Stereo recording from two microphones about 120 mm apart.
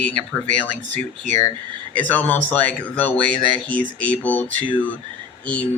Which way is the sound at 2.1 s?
15° left (ahead or behind).